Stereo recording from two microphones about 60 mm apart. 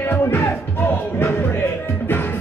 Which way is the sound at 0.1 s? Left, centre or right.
Left.